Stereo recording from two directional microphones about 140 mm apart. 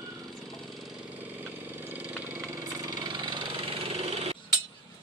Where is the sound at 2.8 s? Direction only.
30° right (ahead or behind).